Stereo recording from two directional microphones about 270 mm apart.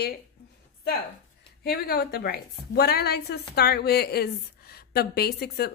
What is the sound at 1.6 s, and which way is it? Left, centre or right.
A woman's voice, left.